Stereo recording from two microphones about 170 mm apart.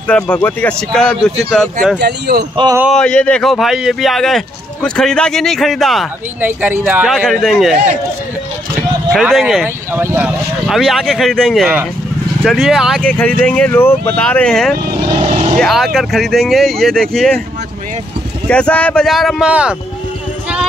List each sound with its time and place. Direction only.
0.1 s speech: 10° left (ahead or behind)
2.0 s speech: 70° right (ahead or behind)
2.5 s speech: 25° right (ahead or behind)
2.8 s speech: centre (ahead or behind)
6.4 s speech: 10° right (ahead or behind)
7.2 s speech: centre (ahead or behind)
9.1 s speech: centre (ahead or behind)
9.9 s speech: 10° right (ahead or behind)
10.7 s speech: centre (ahead or behind)
13.0 s speech: 5° left (ahead or behind)
18.5 s speech: 5° left (ahead or behind)